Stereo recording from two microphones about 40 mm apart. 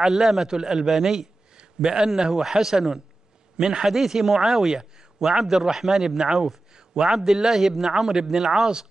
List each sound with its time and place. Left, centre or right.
0.0 s a man's voice: centre
1.6 s a man's voice: centre